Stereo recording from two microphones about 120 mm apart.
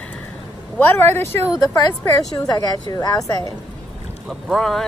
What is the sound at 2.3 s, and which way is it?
A woman's voice, 30° left (ahead or behind).